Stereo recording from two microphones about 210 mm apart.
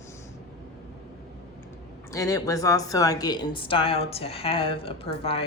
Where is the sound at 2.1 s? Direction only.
15° left (ahead or behind).